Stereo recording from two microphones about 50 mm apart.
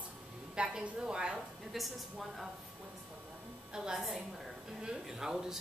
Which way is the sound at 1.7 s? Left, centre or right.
Centre.